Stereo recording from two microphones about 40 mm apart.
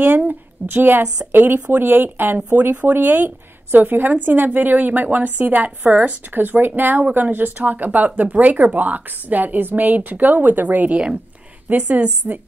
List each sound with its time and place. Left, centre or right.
0.2 s a woman's voice: right
6.3 s a woman's voice: right